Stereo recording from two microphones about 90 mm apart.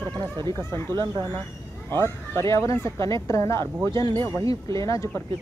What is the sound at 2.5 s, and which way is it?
Speech, 35° left (ahead or behind).